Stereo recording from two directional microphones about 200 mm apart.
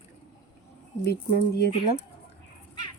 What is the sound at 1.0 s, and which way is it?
Speech, 55° left (ahead or behind).